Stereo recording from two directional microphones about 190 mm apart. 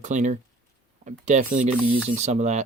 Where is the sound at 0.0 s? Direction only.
40° right (ahead or behind).